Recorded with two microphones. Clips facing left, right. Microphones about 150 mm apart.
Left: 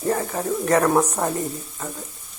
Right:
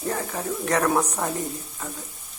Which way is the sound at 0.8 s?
20° left (ahead or behind).